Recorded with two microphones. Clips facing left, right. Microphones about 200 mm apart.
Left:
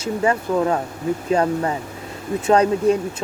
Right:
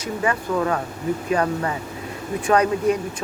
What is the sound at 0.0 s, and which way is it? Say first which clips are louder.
Speech: left 4 dB; 25° left (ahead or behind).